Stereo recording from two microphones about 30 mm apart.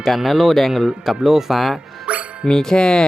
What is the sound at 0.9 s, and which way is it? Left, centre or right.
Speech, centre.